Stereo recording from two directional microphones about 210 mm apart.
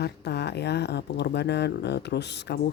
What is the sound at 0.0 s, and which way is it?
Speech, 55° left (ahead or behind).